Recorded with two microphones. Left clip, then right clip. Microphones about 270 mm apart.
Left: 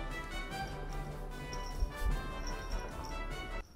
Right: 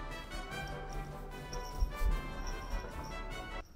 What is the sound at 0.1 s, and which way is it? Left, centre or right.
Music, centre.